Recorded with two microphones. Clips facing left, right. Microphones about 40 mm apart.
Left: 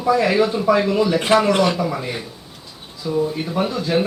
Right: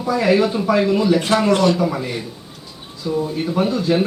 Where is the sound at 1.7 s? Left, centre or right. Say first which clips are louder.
Right 2 dB; centre.